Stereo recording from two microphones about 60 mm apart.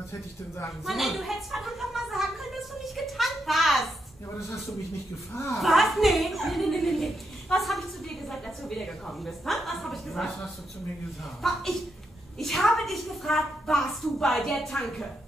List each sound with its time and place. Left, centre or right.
0.8 s a woman's voice: centre
5.6 s a woman's voice: centre
11.4 s a woman's voice: centre